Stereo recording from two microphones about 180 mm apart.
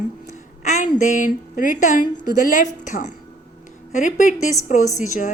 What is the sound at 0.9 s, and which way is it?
A woman's voice, 45° left (ahead or behind).